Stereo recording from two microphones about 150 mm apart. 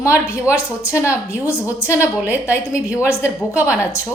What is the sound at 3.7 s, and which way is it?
Speech, 20° left (ahead or behind).